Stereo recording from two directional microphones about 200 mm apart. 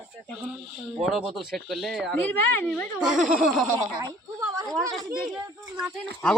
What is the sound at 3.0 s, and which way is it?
Speech, 5° right (ahead or behind).